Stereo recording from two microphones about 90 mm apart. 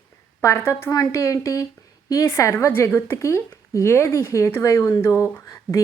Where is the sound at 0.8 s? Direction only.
40° left (ahead or behind).